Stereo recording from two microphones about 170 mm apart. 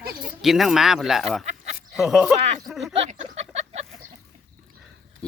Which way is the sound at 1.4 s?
45° right (ahead or behind).